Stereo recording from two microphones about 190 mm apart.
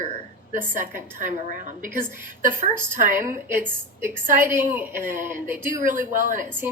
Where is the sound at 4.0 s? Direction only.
15° right (ahead or behind).